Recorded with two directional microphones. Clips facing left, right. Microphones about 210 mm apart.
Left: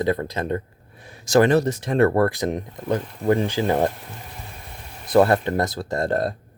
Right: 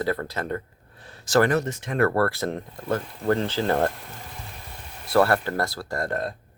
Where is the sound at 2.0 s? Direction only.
20° left (ahead or behind).